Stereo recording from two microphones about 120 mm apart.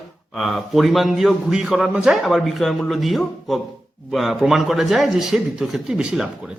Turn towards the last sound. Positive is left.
turn(degrees=-5)  # may be behind; listen again after turning